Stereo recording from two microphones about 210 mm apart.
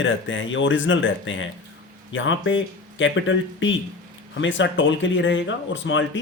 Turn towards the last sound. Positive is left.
turn(degrees=60)  # may be behind; listen again after turning